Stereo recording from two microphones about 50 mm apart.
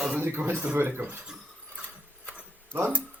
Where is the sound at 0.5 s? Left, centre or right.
Right.